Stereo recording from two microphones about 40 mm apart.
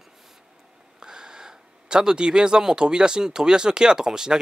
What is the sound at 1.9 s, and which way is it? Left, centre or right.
Speech, centre.